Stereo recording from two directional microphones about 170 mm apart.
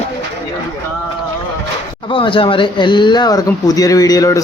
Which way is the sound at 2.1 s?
30° left (ahead or behind).